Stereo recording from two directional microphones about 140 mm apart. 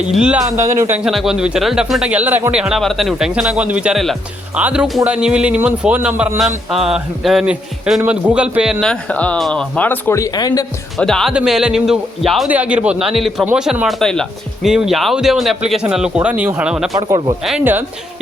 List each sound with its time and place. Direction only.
0.0 s speech: 10° right (ahead or behind)
0.5 s a man's voice: 20° right (ahead or behind)
0.9 s speech: 5° right (ahead or behind)
8.8 s speech: 5° left (ahead or behind); by 10.7 s 25° left (ahead or behind)
10.9 s speech: 5° left (ahead or behind)
16.9 s speech: 30° right (ahead or behind)
17.6 s speech: 15° right (ahead or behind)